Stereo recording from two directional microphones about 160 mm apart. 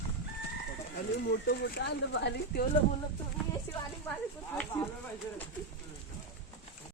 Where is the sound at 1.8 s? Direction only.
85° left.